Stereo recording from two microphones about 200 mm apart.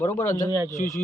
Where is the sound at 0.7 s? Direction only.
35° left (ahead or behind).